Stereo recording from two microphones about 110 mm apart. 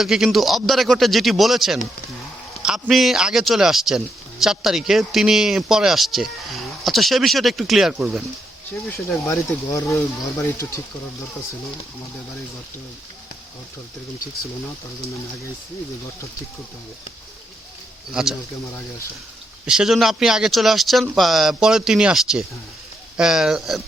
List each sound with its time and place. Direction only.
0.0 s speech: 5° right (ahead or behind)
9.2 s speech: 25° left (ahead or behind)
18.1 s speech: 5° right (ahead or behind)
19.6 s speech: 5° right (ahead or behind)